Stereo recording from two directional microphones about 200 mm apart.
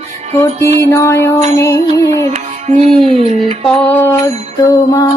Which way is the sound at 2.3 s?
35° right (ahead or behind).